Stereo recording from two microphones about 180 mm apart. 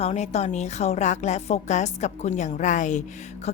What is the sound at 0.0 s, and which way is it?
A woman's voice, 35° left (ahead or behind).